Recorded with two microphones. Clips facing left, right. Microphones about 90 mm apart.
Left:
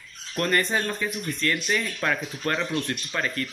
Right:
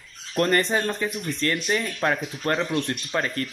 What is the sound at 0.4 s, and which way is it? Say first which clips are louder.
Speech: right 3 dB; 35° right (ahead or behind).